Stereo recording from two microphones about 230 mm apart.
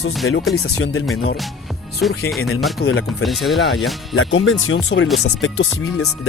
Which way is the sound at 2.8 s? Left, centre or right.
Left.